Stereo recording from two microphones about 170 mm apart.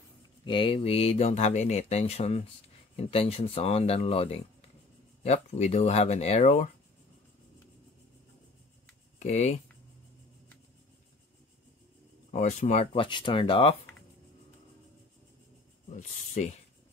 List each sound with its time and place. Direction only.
0.5 s speech: 30° left (ahead or behind)
9.2 s speech: 45° left (ahead or behind)
12.3 s speech: 45° left (ahead or behind)